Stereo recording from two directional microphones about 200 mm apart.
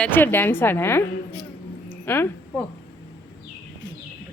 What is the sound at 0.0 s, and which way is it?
A woman's voice, 10° left (ahead or behind).